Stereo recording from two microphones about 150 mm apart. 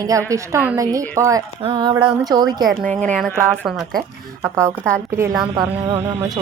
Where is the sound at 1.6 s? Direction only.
35° right (ahead or behind).